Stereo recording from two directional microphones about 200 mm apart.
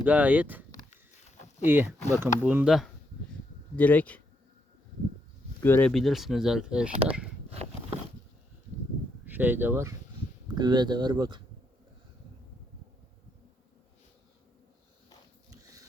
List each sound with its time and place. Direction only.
0.0 s speech: 10° right (ahead or behind)
1.6 s speech: 10° right (ahead or behind); by 4.2 s 5° left (ahead or behind)
5.5 s speech: 10° left (ahead or behind)
5.9 s speech: centre (ahead or behind)
7.5 s biting: 30° right (ahead or behind)
9.2 s speech: 10° right (ahead or behind)